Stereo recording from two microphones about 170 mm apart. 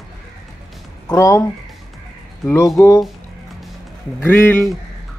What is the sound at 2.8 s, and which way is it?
Speech, 15° left (ahead or behind).